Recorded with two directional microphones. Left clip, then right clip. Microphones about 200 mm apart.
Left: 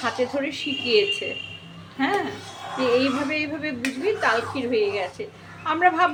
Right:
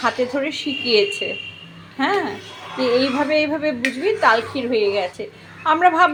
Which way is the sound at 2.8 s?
20° right (ahead or behind).